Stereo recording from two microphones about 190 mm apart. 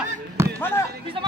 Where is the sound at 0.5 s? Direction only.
10° left (ahead or behind).